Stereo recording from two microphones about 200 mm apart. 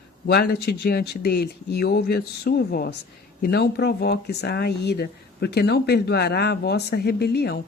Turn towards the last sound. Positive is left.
turn(degrees=55)  # may be behind; listen again after turning